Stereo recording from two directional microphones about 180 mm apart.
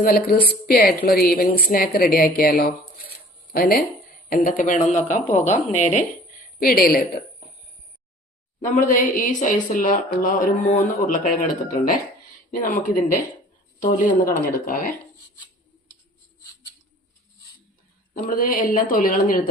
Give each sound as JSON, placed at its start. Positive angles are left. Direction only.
{"t": 0.0, "sound": "a woman's voice", "side_deg": 55}
{"t": 6.6, "sound": "a woman's voice", "side_deg": 55}
{"t": 8.6, "sound": "a man's voice", "side_deg": 45}
{"t": 18.1, "sound": "a man's voice", "side_deg": 50}